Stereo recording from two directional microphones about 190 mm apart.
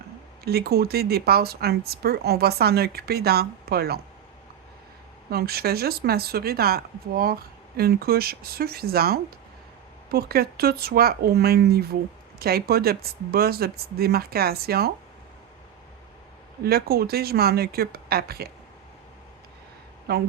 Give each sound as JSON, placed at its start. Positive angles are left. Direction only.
{"t": 0.4, "sound": "speech", "side_deg": -55}
{"t": 5.3, "sound": "speech", "side_deg": -55}
{"t": 16.6, "sound": "speech", "side_deg": -55}
{"t": 20.1, "sound": "speech", "side_deg": -60}